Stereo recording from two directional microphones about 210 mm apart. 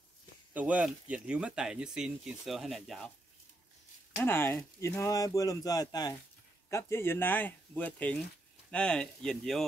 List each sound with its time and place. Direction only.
0.5 s speech: 5° right (ahead or behind)
4.2 s speech: 10° left (ahead or behind)